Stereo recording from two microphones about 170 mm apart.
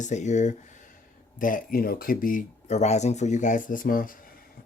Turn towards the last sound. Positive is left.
turn(degrees=55)  # may be behind; listen again after turning